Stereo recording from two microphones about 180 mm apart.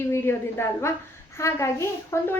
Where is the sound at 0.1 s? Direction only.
15° left (ahead or behind).